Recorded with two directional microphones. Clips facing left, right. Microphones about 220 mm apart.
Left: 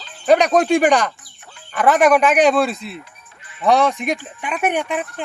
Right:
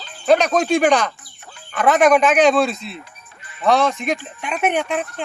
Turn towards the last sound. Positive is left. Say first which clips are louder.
# even
turn(degrees=10)  # may be behind; listen again after turning